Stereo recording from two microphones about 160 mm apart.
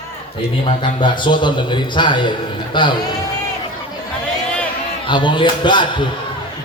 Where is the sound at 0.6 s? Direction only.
30° left (ahead or behind).